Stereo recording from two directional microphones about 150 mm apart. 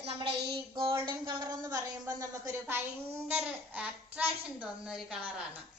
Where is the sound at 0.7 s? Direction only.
35° right (ahead or behind).